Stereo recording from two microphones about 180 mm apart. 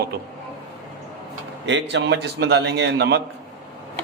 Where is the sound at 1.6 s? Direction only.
80° right.